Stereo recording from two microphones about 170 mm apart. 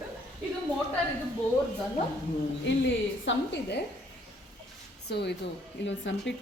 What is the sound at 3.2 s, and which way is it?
Speech, 90° left.